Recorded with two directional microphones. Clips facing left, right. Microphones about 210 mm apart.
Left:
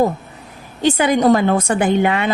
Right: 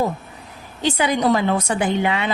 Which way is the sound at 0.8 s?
50° left (ahead or behind).